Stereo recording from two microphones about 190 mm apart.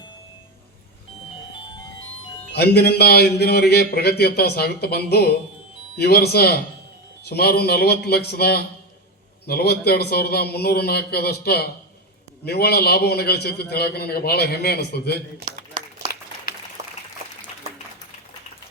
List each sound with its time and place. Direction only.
2.6 s speech: 55° left (ahead or behind)
16.8 s applause: 35° right (ahead or behind)